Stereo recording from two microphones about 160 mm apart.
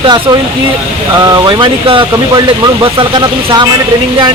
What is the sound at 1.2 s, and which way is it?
Speech, 25° right (ahead or behind).